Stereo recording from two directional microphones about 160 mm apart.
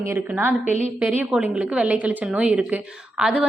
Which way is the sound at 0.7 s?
45° left (ahead or behind).